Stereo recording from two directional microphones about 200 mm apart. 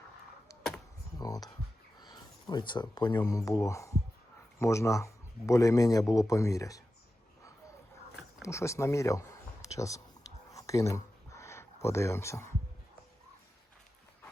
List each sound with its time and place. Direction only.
1.2 s speech: 20° left (ahead or behind)
8.4 s speech: 15° left (ahead or behind)
10.5 s a sound: 15° left (ahead or behind)